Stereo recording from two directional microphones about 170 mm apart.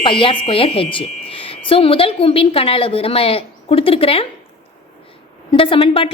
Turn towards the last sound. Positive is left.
turn(degrees=30)  # may be behind; listen again after turning